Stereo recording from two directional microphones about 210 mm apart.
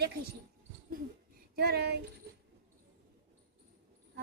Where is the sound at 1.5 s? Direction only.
50° right (ahead or behind).